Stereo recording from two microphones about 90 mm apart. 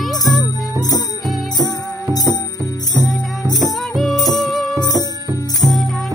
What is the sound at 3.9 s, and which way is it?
Music, centre (ahead or behind).